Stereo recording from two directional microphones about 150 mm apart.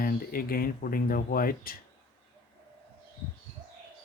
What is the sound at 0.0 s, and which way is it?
Speech, 75° left (ahead or behind).